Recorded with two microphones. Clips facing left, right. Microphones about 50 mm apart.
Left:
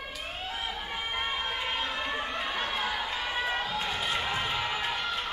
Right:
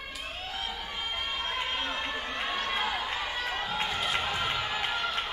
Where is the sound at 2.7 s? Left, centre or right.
Right.